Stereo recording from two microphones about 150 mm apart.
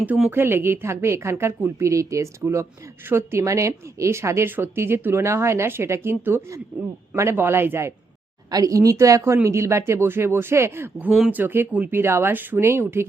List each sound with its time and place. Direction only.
0.0 s speech: 10° right (ahead or behind)
11.1 s speech: 5° right (ahead or behind)